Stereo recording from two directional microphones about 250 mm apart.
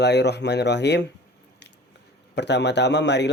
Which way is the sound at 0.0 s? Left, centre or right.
Left.